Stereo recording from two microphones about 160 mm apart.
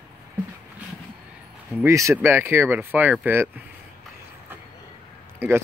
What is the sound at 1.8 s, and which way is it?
Speech, 20° right (ahead or behind).